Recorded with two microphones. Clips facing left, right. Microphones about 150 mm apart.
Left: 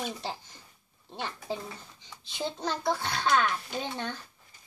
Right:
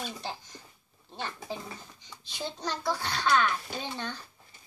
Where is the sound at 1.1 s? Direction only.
25° left (ahead or behind).